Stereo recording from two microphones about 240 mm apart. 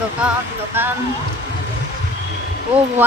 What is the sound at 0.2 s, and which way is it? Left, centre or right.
Music, centre.